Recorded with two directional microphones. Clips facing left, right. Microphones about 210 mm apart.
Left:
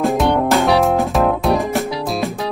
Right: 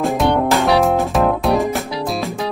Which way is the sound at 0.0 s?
Centre (ahead or behind).